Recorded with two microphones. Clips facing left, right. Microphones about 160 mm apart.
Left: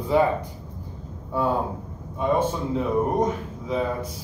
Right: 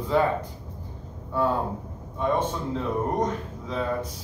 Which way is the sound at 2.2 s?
10° left (ahead or behind).